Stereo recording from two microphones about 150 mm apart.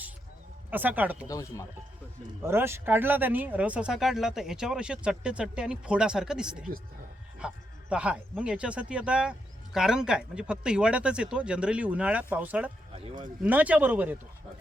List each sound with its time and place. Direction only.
0.7 s speech: 10° right (ahead or behind)
1.3 s speech: 20° left (ahead or behind)
2.4 s speech: 15° right (ahead or behind)